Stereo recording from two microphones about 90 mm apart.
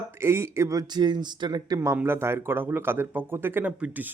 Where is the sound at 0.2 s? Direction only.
30° right (ahead or behind); by 1.8 s 50° right (ahead or behind).